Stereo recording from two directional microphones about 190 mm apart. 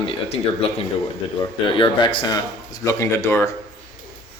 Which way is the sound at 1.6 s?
25° left (ahead or behind).